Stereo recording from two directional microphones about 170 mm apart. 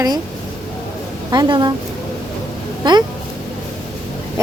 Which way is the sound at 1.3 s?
25° right (ahead or behind).